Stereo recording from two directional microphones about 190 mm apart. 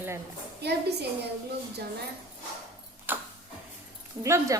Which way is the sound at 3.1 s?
10° right (ahead or behind).